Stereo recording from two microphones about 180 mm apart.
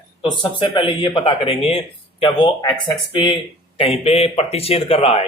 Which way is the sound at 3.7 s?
35° left (ahead or behind).